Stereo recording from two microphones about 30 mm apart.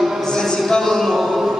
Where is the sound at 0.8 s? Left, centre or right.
Centre.